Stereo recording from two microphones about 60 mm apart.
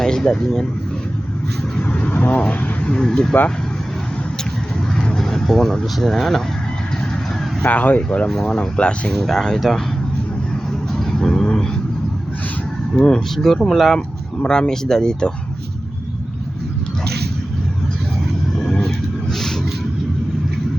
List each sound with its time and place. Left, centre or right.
0.0 s speech: centre
1.9 s speech: left; by 3.3 s centre
4.9 s speech: centre
7.6 s speech: left; by 9.8 s centre
10.9 s vehicle: centre
13.0 s speech: centre
18.8 s vehicle: centre